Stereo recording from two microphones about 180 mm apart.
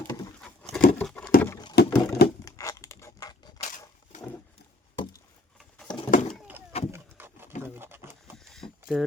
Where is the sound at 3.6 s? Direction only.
45° left (ahead or behind).